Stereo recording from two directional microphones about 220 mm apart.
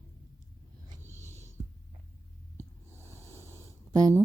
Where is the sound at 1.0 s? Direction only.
10° right (ahead or behind).